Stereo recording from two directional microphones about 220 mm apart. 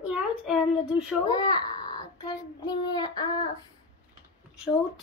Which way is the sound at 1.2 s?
20° left (ahead or behind).